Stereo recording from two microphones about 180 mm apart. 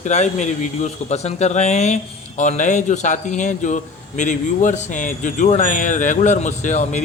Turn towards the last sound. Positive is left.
turn(degrees=40)  # may be behind; listen again after turning